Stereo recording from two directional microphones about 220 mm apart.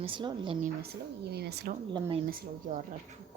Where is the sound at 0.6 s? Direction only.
45° right (ahead or behind).